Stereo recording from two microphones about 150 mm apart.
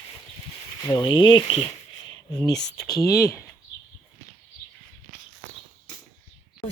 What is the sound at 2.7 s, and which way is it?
Speech, 25° left (ahead or behind).